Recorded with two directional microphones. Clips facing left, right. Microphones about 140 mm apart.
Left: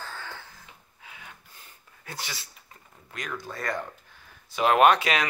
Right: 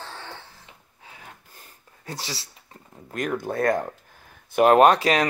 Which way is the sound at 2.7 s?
45° right (ahead or behind).